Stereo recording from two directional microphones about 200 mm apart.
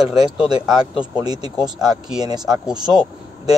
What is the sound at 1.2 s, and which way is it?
A man's voice, 20° right (ahead or behind).